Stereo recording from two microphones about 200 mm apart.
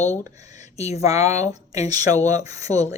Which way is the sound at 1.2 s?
15° right (ahead or behind).